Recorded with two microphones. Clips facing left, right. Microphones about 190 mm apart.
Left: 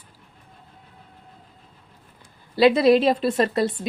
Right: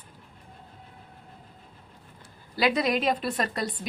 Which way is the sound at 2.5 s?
25° left (ahead or behind).